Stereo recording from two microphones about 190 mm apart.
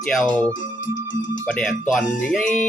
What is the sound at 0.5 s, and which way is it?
Music, 75° left (ahead or behind).